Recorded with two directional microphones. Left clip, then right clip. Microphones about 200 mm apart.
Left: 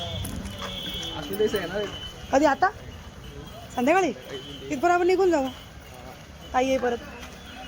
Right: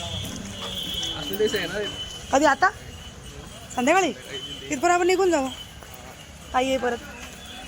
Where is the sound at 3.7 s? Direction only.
5° left (ahead or behind).